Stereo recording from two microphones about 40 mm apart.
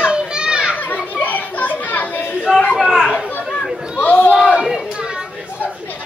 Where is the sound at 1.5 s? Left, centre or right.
Left.